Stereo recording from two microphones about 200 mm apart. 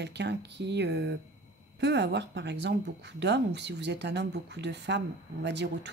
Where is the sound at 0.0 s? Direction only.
60° right (ahead or behind).